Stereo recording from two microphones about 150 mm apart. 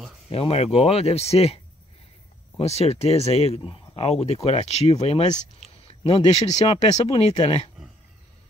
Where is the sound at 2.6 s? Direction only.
45° left (ahead or behind).